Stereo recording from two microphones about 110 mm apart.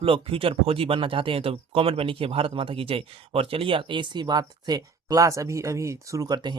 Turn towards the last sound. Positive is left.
turn(degrees=-40)  # may be behind; listen again after turning